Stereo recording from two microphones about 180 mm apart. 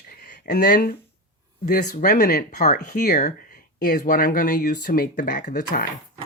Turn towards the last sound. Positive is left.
turn(degrees=50)  # may be behind; listen again after turning